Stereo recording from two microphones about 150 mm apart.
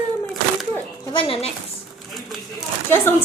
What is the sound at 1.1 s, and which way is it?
Speech, 35° left (ahead or behind).